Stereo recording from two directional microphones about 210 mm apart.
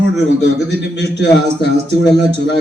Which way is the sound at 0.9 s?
55° left (ahead or behind).